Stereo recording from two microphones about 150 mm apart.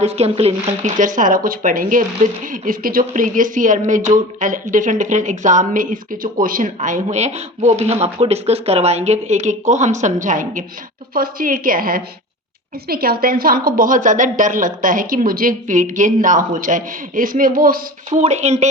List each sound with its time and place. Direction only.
0.0 s speech: 45° right (ahead or behind)
0.9 s a woman's voice: 60° right (ahead or behind)
6.7 s speech: 55° right (ahead or behind)
11.1 s a woman's voice: 75° right (ahead or behind)
12.9 s a woman's voice: 90° right; by 18.2 s 70° right (ahead or behind)
18.2 s speech: 50° right (ahead or behind)